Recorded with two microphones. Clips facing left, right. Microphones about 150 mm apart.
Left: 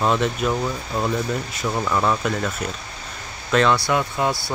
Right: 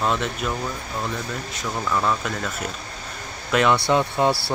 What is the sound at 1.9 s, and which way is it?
Speech, 15° left (ahead or behind).